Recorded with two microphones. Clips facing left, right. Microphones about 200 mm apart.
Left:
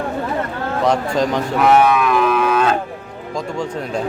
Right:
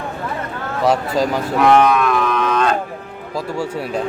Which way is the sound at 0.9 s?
5° right (ahead or behind).